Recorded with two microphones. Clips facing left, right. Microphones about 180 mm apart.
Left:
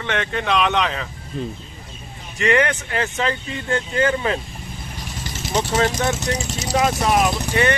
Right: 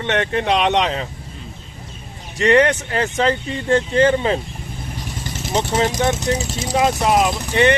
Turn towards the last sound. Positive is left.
turn(degrees=-25)  # may be behind; listen again after turning